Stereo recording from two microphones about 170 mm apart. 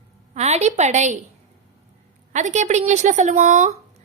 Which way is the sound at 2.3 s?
45° right (ahead or behind).